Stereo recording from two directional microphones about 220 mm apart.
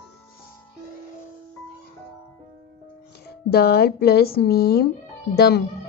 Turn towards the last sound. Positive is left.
turn(degrees=45)  # may be behind; listen again after turning